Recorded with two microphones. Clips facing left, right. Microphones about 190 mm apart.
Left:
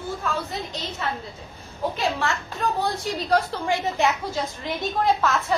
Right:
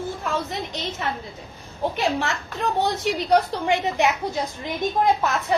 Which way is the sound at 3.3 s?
15° right (ahead or behind).